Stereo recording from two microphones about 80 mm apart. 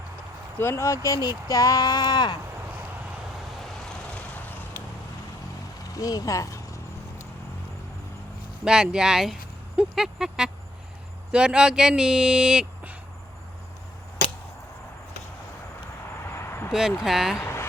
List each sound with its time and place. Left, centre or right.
0.6 s speech: left
4.1 s vehicle: left
5.9 s speech: left
8.6 s speech: centre
16.2 s a sound: left
17.0 s speech: centre
17.3 s a sound: left